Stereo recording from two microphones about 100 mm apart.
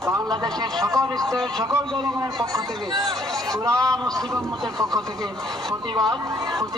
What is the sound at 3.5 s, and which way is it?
Speech, 35° right (ahead or behind).